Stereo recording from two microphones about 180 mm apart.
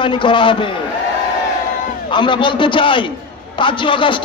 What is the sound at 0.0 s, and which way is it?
Speech, 25° left (ahead or behind).